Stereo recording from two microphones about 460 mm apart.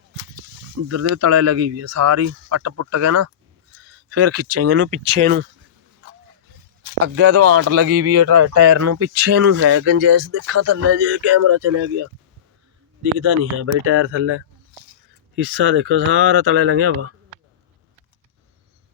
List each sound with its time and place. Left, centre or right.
0.9 s speech: right
7.0 s speech: right
15.4 s speech: right